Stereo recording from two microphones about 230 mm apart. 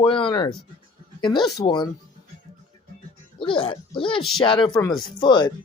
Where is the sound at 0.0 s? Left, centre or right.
Left.